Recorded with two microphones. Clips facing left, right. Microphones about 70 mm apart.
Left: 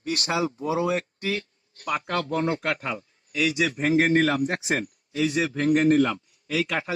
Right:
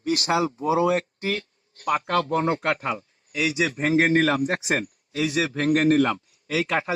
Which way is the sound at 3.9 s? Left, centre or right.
Right.